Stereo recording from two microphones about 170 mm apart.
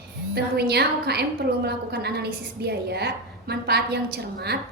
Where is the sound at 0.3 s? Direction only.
70° right (ahead or behind).